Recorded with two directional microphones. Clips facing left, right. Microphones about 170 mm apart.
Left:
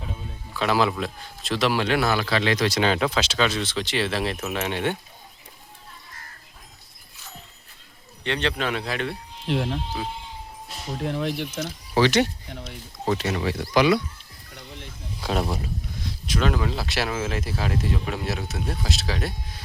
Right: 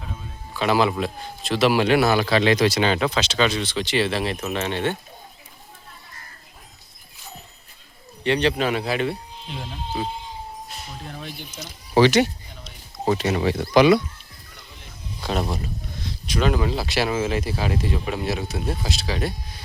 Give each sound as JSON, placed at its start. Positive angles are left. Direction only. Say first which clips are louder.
{"t": 0.5, "sound": "speech", "louder": "right 2 dB", "side_deg": 0}
{"t": 2.6, "sound": "speech", "louder": "right 2 dB", "side_deg": 0}
{"t": 8.2, "sound": "speech", "louder": "right 5 dB", "side_deg": -10}
{"t": 9.5, "sound": "speech", "louder": "left 10 dB", "side_deg": 70}
{"t": 11.0, "sound": "speech", "louder": "left 14 dB", "side_deg": 75}
{"t": 11.9, "sound": "speech", "louder": "right 4 dB", "side_deg": -15}
{"t": 12.5, "sound": "speech", "louder": "left 6 dB", "side_deg": 65}
{"t": 13.1, "sound": "speech", "louder": "right 4 dB", "side_deg": -20}
{"t": 15.2, "sound": "speech", "louder": "even", "side_deg": 0}